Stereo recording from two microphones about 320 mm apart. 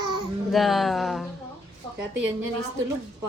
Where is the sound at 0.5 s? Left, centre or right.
Centre.